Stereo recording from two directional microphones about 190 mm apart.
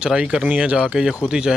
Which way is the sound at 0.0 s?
5° right (ahead or behind).